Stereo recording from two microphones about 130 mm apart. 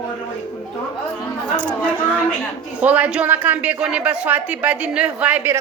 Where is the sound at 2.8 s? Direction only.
10° right (ahead or behind).